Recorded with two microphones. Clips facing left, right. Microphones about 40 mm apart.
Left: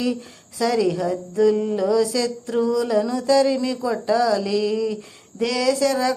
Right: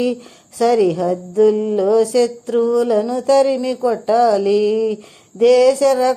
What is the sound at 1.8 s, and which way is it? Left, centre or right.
Mantra, right.